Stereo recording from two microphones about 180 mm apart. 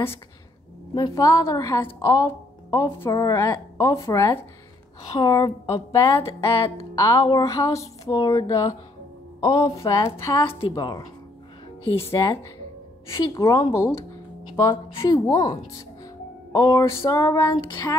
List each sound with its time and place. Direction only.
0.9 s a woman's voice: 20° left (ahead or behind)
11.8 s speech: 30° left (ahead or behind)
13.2 s a woman's voice: 20° left (ahead or behind)
16.5 s a woman's voice: 20° left (ahead or behind)